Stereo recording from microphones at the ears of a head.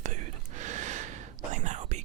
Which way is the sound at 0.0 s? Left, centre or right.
Right.